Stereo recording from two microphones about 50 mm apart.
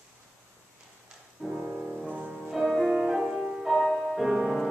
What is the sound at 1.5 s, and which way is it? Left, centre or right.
Music, centre.